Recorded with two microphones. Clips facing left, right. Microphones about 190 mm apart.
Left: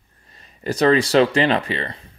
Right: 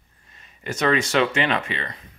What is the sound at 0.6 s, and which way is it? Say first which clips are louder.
Speech: left 5 dB; 35° left (ahead or behind).